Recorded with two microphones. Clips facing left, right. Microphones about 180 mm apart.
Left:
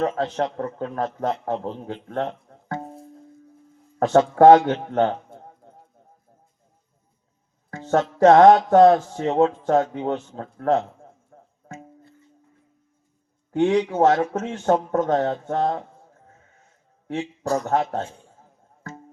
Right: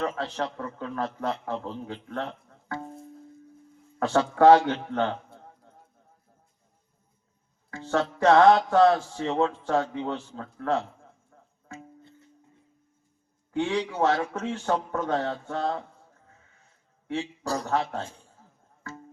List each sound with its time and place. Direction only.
0.0 s a man's voice: 40° left (ahead or behind)
4.0 s a man's voice: 40° left (ahead or behind)
7.7 s a man's voice: 40° left (ahead or behind)
10.3 s music: 40° left (ahead or behind)
13.5 s a man's voice: 40° left (ahead or behind)
17.4 s speech: 35° right (ahead or behind)
17.7 s a man's voice: 40° left (ahead or behind)
18.8 s music: 40° left (ahead or behind)